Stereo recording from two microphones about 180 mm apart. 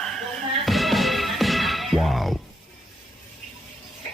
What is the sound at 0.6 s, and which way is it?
Music, centre (ahead or behind).